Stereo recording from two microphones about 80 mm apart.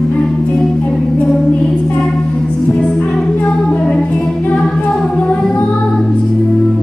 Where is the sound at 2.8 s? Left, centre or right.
Centre.